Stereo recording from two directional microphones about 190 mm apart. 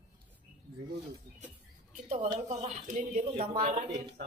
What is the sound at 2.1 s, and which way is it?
Speech, 40° right (ahead or behind).